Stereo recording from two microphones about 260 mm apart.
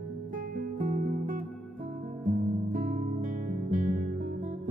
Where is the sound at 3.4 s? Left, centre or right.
Right.